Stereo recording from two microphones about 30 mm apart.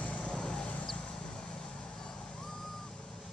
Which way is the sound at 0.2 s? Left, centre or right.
Left.